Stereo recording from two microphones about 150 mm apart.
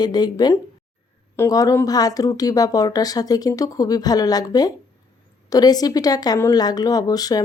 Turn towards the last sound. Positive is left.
turn(degrees=25)  # may be behind; listen again after turning